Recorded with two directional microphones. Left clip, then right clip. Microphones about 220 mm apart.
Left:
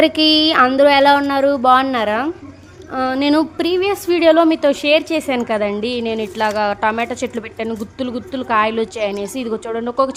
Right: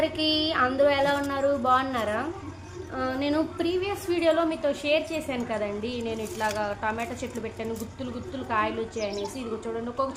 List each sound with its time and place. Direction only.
0.0 s a woman's voice: 50° left (ahead or behind)